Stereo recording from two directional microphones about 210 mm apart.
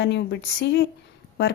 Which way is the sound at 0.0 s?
55° left (ahead or behind).